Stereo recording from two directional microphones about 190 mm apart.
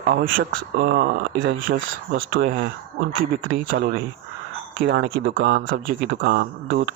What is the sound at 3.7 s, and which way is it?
Speech, 50° right (ahead or behind).